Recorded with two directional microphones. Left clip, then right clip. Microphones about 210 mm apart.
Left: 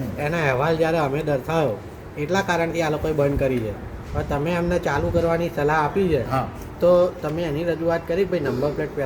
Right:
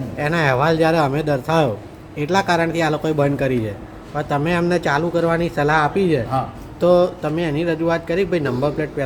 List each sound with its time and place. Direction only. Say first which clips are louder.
0.2 s speech: right 4 dB; 50° right (ahead or behind)